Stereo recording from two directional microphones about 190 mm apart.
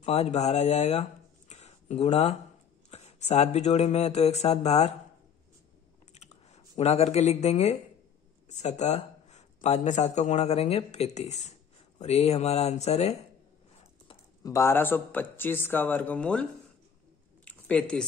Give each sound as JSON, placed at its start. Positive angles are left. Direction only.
{"t": 0.0, "sound": "speech", "side_deg": 35}
{"t": 1.5, "sound": "a sound", "side_deg": 35}
{"t": 2.9, "sound": "speech", "side_deg": 35}
{"t": 6.1, "sound": "typing", "side_deg": 35}
{"t": 6.8, "sound": "speech", "side_deg": 35}
{"t": 14.4, "sound": "speech", "side_deg": 15}
{"t": 17.5, "sound": "a sound", "side_deg": 5}